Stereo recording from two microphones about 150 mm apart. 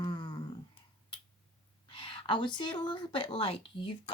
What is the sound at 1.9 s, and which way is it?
Speech, 35° left (ahead or behind).